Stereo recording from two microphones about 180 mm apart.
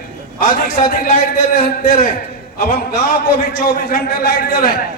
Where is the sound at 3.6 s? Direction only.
55° left (ahead or behind).